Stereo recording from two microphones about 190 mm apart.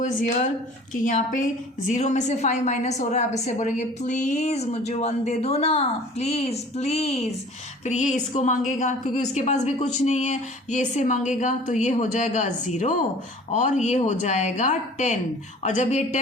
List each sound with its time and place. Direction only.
0.0 s a woman's voice: 40° left (ahead or behind)